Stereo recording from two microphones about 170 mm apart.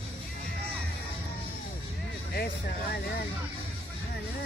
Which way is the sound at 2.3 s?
65° left (ahead or behind).